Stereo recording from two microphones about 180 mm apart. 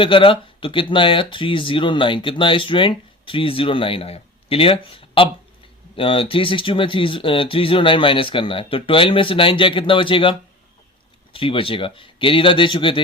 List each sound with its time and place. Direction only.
0.0 s speech: 30° left (ahead or behind)
11.3 s speech: 30° left (ahead or behind)